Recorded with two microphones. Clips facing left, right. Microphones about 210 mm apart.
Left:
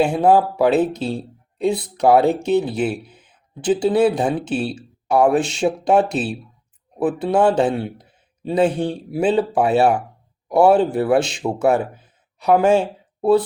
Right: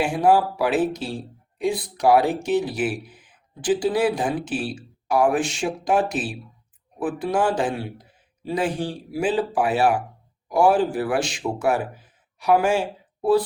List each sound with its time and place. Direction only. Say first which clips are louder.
0.0 s speech: left 4 dB; 25° left (ahead or behind)